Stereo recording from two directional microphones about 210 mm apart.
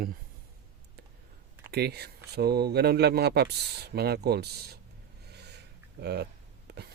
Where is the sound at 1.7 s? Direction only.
50° right (ahead or behind).